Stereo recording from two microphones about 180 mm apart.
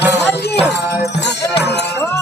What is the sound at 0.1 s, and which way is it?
Music, 70° left (ahead or behind).